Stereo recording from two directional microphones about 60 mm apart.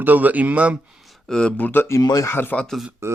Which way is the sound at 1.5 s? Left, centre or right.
Left.